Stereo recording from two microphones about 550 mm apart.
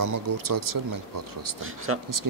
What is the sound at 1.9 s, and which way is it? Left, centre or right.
Speech, right.